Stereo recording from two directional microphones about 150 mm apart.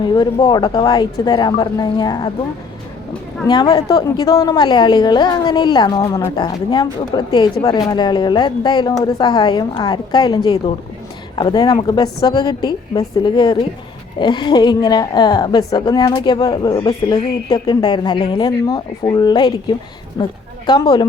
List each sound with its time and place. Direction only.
0.0 s a woman's voice: 30° left (ahead or behind)
3.4 s a woman's voice: 30° left (ahead or behind)